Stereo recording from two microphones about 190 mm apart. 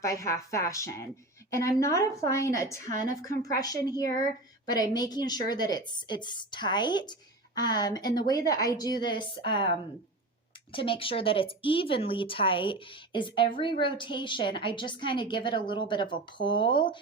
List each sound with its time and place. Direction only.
0.0 s a woman's voice: 15° left (ahead or behind)